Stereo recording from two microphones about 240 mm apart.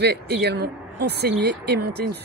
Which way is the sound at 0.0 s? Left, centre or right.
Right.